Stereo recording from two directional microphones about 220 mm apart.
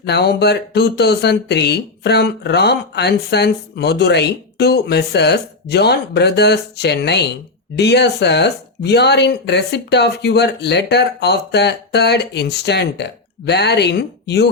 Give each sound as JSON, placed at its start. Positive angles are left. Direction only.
{"t": 0.0, "sound": "speech", "side_deg": 50}